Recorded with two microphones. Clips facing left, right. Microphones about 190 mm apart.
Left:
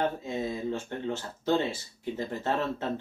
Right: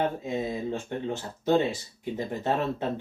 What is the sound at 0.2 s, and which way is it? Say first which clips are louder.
Speech: right 2 dB; 15° right (ahead or behind).